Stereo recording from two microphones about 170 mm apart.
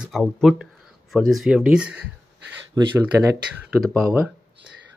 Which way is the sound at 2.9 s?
15° right (ahead or behind).